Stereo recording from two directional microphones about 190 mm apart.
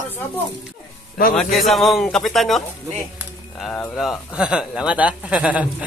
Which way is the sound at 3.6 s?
5° left (ahead or behind).